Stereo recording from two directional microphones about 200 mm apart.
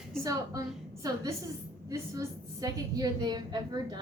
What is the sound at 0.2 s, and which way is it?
A woman's voice, 15° right (ahead or behind).